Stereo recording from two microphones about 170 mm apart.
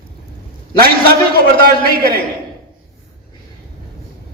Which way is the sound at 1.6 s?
60° right (ahead or behind).